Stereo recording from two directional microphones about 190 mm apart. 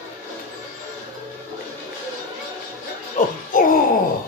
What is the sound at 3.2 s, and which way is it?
Music, 40° left (ahead or behind).